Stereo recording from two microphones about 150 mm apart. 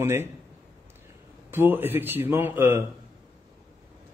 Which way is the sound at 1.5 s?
15° right (ahead or behind).